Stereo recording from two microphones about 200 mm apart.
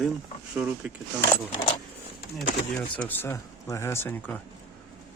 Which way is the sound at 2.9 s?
10° left (ahead or behind).